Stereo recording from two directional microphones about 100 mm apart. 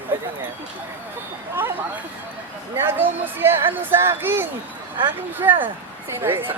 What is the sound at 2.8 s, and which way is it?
Speech, 20° right (ahead or behind).